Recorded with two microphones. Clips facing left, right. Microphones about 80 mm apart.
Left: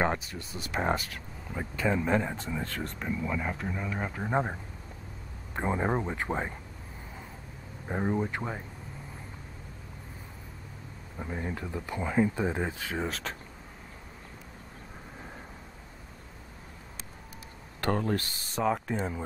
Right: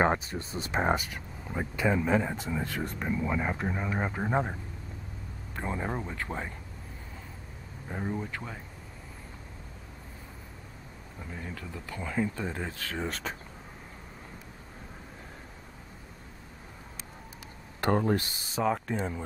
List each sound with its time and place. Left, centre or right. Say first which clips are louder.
0.0 s speech: right 3 dB; right
2.0 s speech: right 1 dB; centre; by 4.3 s right
5.5 s speech: left 5 dB; left
7.9 s speech: left 5 dB; left
11.1 s speech: left 6 dB; left
13.0 s speech: right 2 dB; centre
17.7 s speech: right 3 dB; centre
18.5 s speech: even; centre